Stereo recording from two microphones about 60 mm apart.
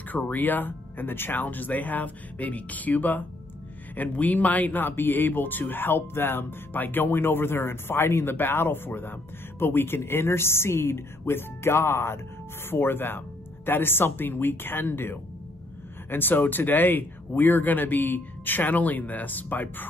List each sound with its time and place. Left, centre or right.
0.1 s speech: left